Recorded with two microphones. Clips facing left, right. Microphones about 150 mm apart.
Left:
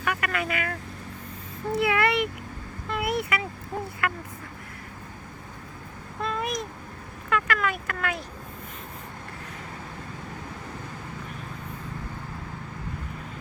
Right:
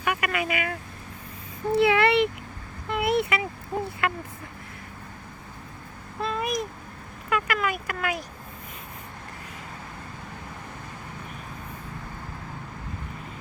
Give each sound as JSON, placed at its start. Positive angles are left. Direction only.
{"t": 0.0, "sound": "vehicle", "side_deg": -15}
{"t": 1.7, "sound": "a child's voice", "side_deg": -25}
{"t": 2.9, "sound": "a sound", "side_deg": -25}
{"t": 4.0, "sound": "speech", "side_deg": -25}
{"t": 6.2, "sound": "a sound", "side_deg": -5}
{"t": 7.3, "sound": "speech", "side_deg": -10}